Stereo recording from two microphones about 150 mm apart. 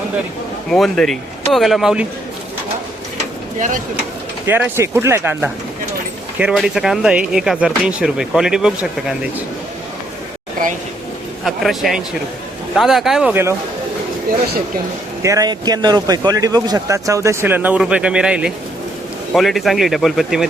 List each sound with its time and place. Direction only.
0.7 s speech: centre (ahead or behind)
4.4 s speech: 15° right (ahead or behind)
11.4 s speech: centre (ahead or behind)
15.2 s speech: 20° right (ahead or behind); by 20.4 s centre (ahead or behind)